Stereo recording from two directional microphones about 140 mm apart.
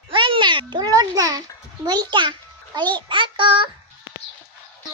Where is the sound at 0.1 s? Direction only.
35° right (ahead or behind).